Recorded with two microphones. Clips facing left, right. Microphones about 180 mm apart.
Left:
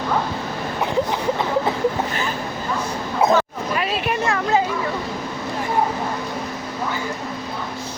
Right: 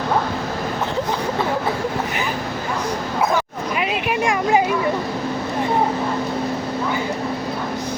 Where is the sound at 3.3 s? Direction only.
15° right (ahead or behind).